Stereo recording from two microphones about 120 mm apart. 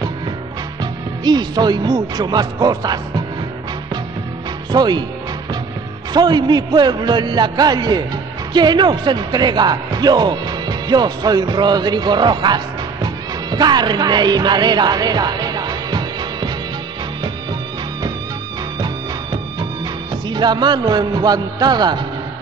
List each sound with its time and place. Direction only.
1.2 s a man's voice: 35° right (ahead or behind)
4.7 s a man's voice: 35° right (ahead or behind)
6.1 s a man's voice: 35° right (ahead or behind)
20.2 s a man's voice: 40° right (ahead or behind)